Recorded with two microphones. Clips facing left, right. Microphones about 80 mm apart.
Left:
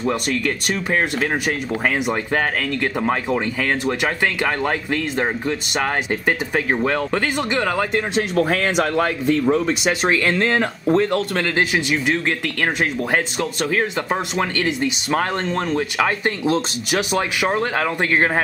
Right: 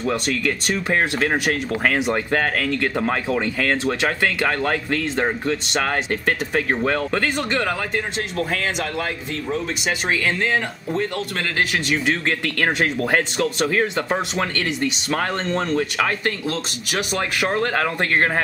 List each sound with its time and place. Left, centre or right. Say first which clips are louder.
0.7 s speech: right 1 dB; centre
2.7 s speech: left 1 dB; centre
8.5 s speech: left 5 dB; left
11.7 s speech: left 2 dB; centre